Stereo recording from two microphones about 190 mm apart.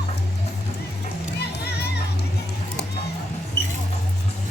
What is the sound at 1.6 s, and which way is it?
Music, 60° left (ahead or behind).